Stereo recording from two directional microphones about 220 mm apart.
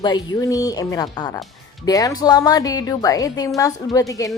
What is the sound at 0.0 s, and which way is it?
A woman's voice, 20° left (ahead or behind).